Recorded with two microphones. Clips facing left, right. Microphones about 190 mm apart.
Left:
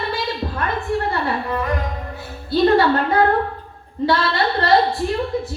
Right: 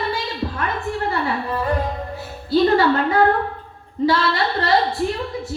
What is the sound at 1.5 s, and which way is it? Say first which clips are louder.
Music: right 1 dB; 30° right (ahead or behind).